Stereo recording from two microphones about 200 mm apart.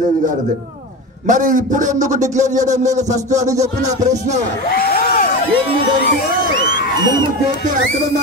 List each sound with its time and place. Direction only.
1.2 s a man's voice: 40° right (ahead or behind)
4.6 s speech: 50° left (ahead or behind)